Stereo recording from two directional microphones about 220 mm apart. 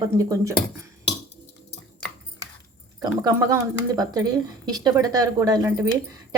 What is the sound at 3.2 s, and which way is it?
Speech, 15° right (ahead or behind).